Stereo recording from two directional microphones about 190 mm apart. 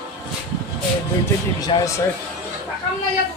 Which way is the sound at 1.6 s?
15° left (ahead or behind).